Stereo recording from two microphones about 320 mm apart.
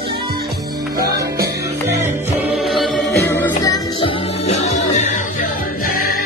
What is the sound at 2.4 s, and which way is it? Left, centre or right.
Music, centre.